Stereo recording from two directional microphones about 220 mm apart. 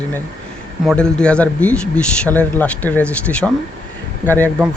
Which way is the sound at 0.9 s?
5° left (ahead or behind).